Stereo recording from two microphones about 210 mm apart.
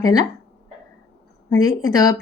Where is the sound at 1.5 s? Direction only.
20° left (ahead or behind).